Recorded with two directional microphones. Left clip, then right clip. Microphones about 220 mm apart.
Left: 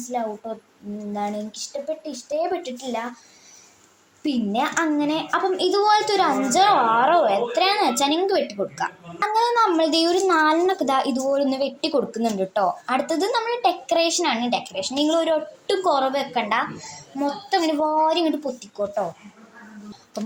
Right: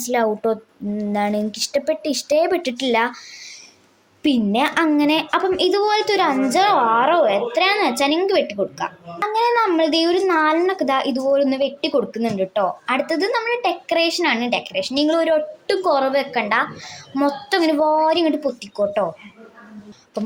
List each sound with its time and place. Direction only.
0.1 s speech: 45° right (ahead or behind)
4.2 s a woman's voice: 30° right (ahead or behind)